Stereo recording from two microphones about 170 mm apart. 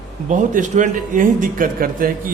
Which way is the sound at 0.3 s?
50° right (ahead or behind).